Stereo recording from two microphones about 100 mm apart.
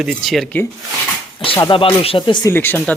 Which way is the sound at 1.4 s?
60° left (ahead or behind).